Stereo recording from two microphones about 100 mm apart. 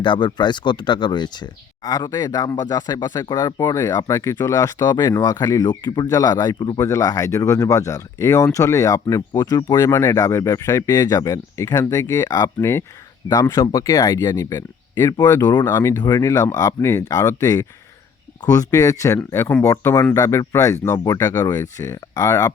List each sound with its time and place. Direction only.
0.0 s speech: 50° left (ahead or behind); by 5.6 s 35° left (ahead or behind)
5.6 s speech: 45° left (ahead or behind)
6.7 s speech: 30° left (ahead or behind)
9.7 s speech: 30° left (ahead or behind)
12.5 s speech: 25° left (ahead or behind)
15.4 s speech: 40° left (ahead or behind)
15.6 s speech: 25° left (ahead or behind)
16.0 s speech: 35° left (ahead or behind)